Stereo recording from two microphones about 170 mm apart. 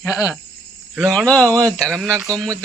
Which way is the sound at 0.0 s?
20° left (ahead or behind).